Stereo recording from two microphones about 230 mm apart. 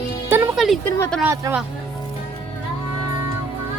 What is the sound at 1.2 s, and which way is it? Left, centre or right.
Speech, centre.